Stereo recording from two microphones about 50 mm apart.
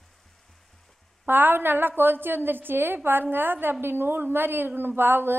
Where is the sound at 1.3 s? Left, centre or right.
Right.